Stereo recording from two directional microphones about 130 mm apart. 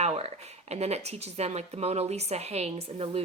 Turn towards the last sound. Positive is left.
turn(degrees=-50)  # may be behind; listen again after turning